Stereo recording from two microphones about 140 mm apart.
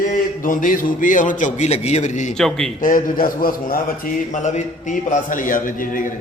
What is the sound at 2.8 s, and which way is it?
A man's voice, 75° left (ahead or behind).